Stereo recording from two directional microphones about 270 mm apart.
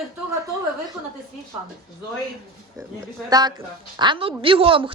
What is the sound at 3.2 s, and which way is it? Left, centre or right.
A woman's voice, centre.